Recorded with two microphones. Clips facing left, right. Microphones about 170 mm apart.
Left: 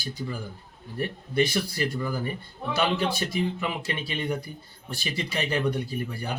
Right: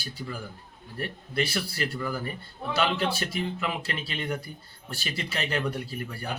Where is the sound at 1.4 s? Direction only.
15° left (ahead or behind).